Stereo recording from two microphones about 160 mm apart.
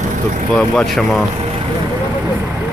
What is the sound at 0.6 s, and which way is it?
Speech, centre (ahead or behind).